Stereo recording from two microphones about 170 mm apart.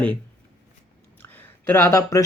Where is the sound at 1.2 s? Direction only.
10° left (ahead or behind).